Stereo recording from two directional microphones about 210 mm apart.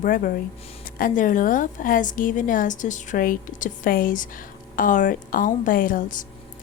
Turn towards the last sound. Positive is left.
turn(degrees=40)  # may be behind; listen again after turning